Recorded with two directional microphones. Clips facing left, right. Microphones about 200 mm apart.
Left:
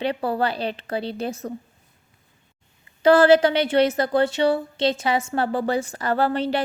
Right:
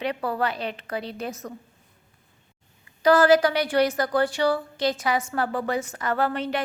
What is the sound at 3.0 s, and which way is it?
A woman's voice, 30° left (ahead or behind).